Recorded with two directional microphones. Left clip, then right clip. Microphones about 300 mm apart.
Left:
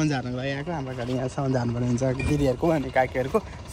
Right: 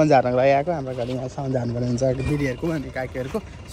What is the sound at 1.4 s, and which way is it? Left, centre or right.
Speech, left.